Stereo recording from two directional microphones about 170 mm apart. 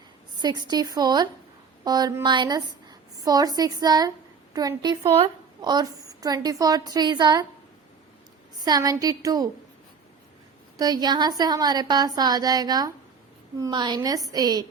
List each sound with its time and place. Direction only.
0.3 s a woman's voice: 25° right (ahead or behind)
8.5 s a woman's voice: 25° right (ahead or behind)
10.8 s a woman's voice: 25° right (ahead or behind)